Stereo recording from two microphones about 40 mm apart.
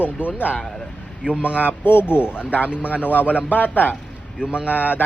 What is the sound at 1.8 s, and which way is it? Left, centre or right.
Speech, left.